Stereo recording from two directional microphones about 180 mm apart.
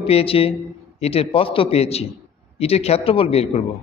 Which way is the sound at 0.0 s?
35° left (ahead or behind).